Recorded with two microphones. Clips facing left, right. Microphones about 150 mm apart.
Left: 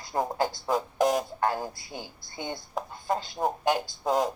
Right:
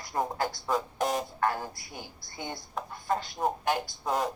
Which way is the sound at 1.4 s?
25° left (ahead or behind).